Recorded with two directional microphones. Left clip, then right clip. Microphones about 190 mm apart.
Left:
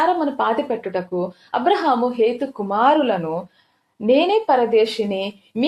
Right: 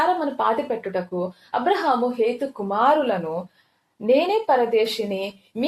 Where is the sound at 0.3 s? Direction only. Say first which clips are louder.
Left 2 dB; 30° left (ahead or behind).